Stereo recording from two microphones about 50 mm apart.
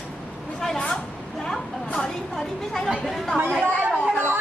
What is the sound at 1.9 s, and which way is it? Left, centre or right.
A woman's voice, centre.